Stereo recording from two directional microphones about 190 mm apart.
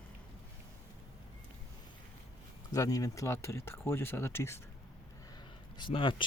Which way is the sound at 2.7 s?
20° left (ahead or behind).